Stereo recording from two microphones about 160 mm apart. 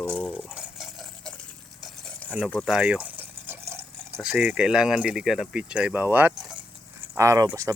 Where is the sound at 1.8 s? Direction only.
5° left (ahead or behind).